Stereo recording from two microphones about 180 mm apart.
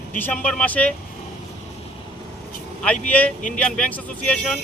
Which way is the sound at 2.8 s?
5° left (ahead or behind).